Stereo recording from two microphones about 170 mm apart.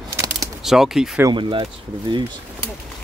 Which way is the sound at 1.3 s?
30° right (ahead or behind).